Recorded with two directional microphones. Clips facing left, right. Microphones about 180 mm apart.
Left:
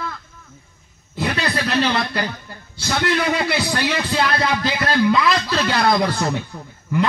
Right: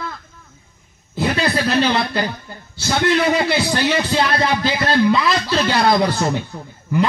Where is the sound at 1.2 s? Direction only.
30° right (ahead or behind).